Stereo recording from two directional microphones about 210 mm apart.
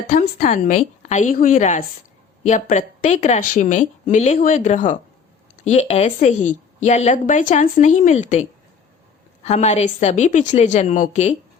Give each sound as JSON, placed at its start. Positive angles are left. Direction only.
{"t": 0.1, "sound": "a woman's voice", "side_deg": 40}